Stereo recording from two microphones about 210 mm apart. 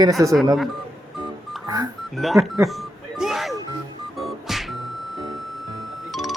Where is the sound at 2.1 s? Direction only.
Centre (ahead or behind).